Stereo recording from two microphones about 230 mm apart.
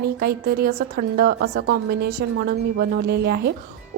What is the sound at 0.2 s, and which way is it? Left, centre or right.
A woman's voice, right.